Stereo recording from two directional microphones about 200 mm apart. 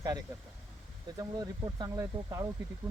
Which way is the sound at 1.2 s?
20° right (ahead or behind).